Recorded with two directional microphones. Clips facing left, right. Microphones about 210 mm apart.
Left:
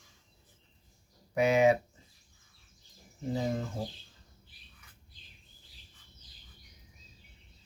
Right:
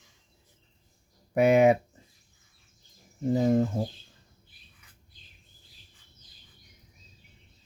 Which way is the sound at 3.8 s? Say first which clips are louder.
Right 6 dB; 50° right (ahead or behind).